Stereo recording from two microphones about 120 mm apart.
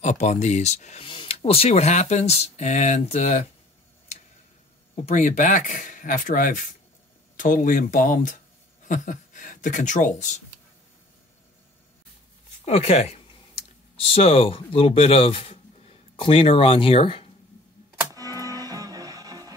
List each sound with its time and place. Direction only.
0.0 s speech: 80° left
1.0 s speech: 45° left (ahead or behind); by 3.4 s 70° left (ahead or behind)
4.9 s speech: 70° left (ahead or behind)
12.6 s speech: 60° left (ahead or behind)
18.1 s music: 30° right (ahead or behind)